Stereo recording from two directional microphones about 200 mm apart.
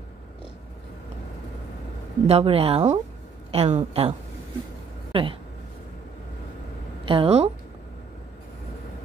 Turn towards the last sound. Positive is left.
turn(degrees=-30)  # may be behind; listen again after turning